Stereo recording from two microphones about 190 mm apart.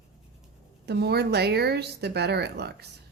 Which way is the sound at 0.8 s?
60° right (ahead or behind).